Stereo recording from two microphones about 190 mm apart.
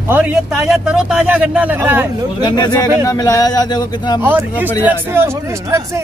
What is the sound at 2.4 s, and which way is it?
Speech, 20° left (ahead or behind).